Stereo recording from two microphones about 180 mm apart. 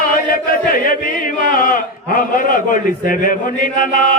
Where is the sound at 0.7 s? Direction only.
50° left (ahead or behind).